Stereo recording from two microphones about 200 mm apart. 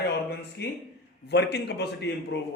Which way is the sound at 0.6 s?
55° left (ahead or behind).